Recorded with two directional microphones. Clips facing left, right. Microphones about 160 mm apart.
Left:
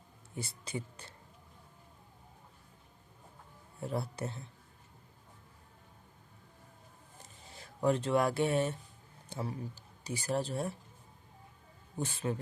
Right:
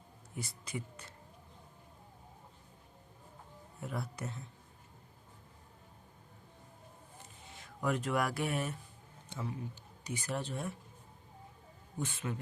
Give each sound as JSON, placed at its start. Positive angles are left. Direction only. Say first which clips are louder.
{"t": 0.3, "sound": "speech", "louder": "left 2 dB", "side_deg": 30}
{"t": 3.8, "sound": "speech", "louder": "left 4 dB", "side_deg": 30}
{"t": 7.4, "sound": "speech", "louder": "left 5 dB", "side_deg": 35}
{"t": 11.9, "sound": "speech", "louder": "left 3 dB", "side_deg": 35}